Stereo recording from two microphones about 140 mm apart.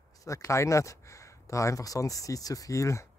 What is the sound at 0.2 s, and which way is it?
Speech, 20° left (ahead or behind).